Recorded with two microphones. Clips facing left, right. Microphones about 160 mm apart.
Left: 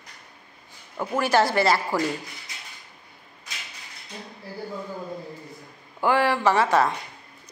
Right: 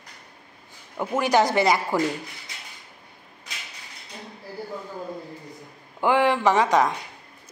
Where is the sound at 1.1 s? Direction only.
20° right (ahead or behind).